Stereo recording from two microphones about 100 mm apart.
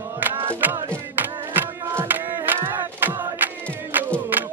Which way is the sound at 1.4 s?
20° right (ahead or behind).